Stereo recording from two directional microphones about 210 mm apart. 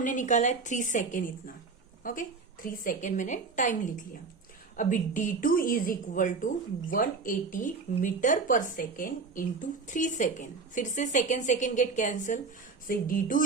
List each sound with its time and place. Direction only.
0.0 s speech: 40° left (ahead or behind)